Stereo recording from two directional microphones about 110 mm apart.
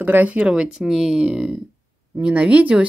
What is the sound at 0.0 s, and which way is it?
Speech, 15° right (ahead or behind).